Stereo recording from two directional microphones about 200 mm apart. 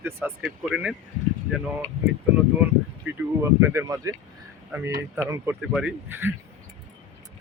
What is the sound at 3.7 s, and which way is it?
Speech, 15° right (ahead or behind).